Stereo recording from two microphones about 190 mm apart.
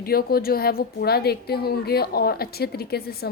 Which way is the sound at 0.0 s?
55° left (ahead or behind).